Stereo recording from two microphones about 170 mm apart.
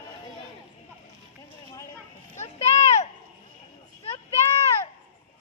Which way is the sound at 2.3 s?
40° left (ahead or behind).